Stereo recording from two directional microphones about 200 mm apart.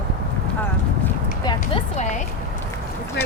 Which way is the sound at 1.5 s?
25° left (ahead or behind).